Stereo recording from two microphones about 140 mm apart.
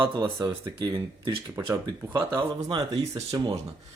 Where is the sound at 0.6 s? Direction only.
30° right (ahead or behind).